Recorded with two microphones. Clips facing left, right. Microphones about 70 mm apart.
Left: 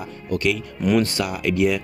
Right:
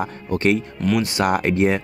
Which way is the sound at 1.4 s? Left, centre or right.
Right.